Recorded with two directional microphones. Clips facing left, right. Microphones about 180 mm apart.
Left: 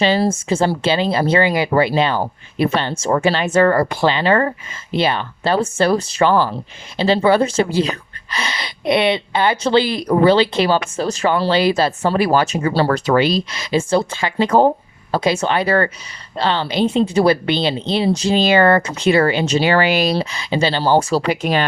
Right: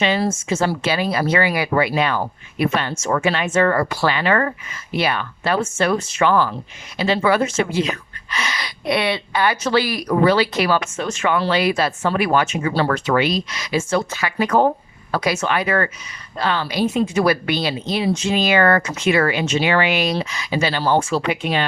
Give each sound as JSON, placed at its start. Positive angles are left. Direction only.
{"t": 0.0, "sound": "speech", "side_deg": 30}